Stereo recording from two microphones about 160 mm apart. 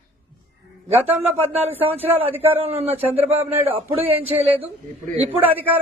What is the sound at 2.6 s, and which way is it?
Speech, 40° right (ahead or behind).